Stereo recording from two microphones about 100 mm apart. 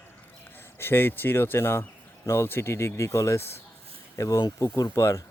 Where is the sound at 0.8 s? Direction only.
25° left (ahead or behind).